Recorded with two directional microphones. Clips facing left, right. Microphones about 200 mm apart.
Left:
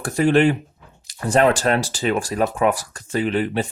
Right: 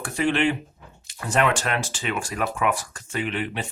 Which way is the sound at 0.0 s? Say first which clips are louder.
Left 6 dB; 45° left (ahead or behind).